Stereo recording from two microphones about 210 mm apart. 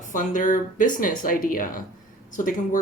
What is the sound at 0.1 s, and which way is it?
Speech, 40° left (ahead or behind).